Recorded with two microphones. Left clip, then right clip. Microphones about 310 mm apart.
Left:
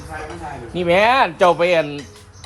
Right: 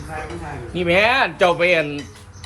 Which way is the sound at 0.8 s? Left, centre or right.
Centre.